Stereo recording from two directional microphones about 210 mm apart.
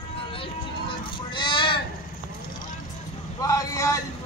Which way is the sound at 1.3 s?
25° left (ahead or behind).